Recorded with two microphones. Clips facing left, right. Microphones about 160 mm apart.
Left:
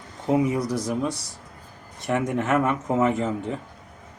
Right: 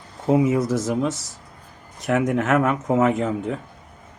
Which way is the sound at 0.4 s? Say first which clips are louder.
Right 4 dB; 25° right (ahead or behind).